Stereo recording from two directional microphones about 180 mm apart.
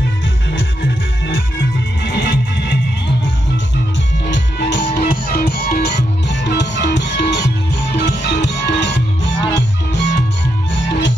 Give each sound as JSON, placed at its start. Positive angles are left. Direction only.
{"t": 1.2, "sound": "music", "side_deg": 75}
{"t": 4.3, "sound": "music", "side_deg": 75}